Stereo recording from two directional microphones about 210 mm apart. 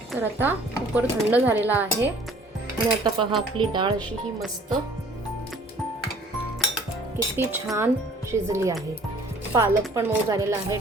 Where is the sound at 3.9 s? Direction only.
Centre (ahead or behind).